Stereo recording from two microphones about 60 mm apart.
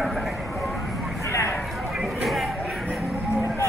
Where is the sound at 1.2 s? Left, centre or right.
Left.